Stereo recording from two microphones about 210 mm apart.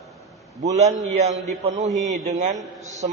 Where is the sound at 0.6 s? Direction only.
30° right (ahead or behind).